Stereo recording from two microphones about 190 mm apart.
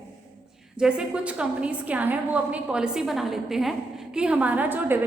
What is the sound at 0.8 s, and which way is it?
A woman's voice, 5° right (ahead or behind).